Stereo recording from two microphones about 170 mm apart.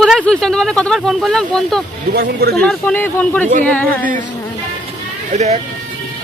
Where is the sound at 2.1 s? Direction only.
70° right (ahead or behind).